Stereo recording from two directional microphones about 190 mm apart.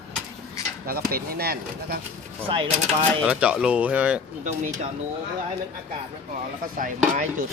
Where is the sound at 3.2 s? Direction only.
5° right (ahead or behind).